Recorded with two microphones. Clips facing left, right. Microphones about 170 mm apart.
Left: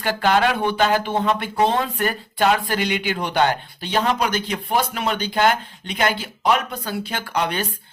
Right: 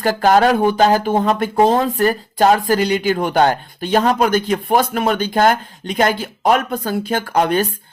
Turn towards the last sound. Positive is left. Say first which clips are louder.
# right 7 dB
turn(degrees=-45)  # may be behind; listen again after turning